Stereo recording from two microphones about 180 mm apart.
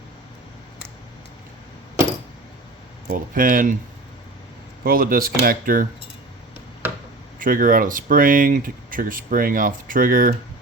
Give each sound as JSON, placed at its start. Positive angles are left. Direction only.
{"t": 3.1, "sound": "speech", "side_deg": -50}
{"t": 4.8, "sound": "speech", "side_deg": -55}
{"t": 7.3, "sound": "speech", "side_deg": -50}